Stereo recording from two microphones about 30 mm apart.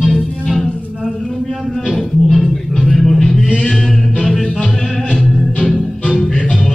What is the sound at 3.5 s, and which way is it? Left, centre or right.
A capella, left.